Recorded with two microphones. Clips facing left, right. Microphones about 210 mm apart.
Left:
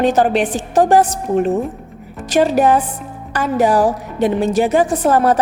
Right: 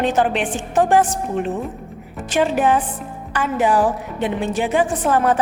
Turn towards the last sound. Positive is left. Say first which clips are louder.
# left 4 dB
turn(degrees=40)  # may be behind; listen again after turning